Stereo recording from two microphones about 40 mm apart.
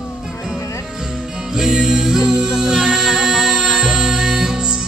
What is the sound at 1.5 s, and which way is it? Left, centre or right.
Music, centre.